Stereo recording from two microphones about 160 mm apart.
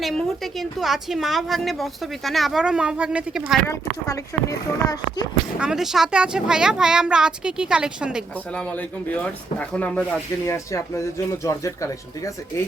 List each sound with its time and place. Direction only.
0.0 s a woman's voice: centre (ahead or behind)
3.7 s speech: 20° left (ahead or behind)
5.5 s a woman's voice: 5° right (ahead or behind)
8.5 s speech: 10° left (ahead or behind)